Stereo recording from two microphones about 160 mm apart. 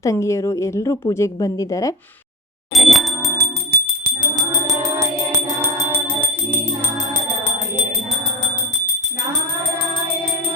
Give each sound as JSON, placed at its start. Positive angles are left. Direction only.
{"t": 0.0, "sound": "a woman's voice", "side_deg": 20}
{"t": 2.7, "sound": "bicycle bell", "side_deg": 0}
{"t": 3.3, "sound": "music", "side_deg": -80}
{"t": 4.4, "sound": "music", "side_deg": -20}